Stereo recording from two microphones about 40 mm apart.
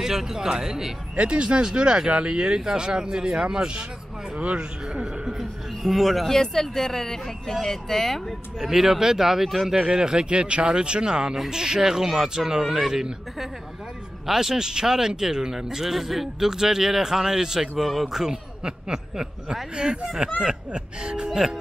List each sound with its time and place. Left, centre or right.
0.0 s speech: centre
1.1 s speech: right
5.4 s speech: centre
6.2 s speech: centre
8.5 s speech: centre
9.8 s speech: right
17.7 s speech: centre
18.0 s speech: centre